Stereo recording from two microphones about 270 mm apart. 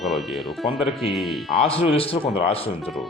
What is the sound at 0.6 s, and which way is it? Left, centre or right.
Speech, centre.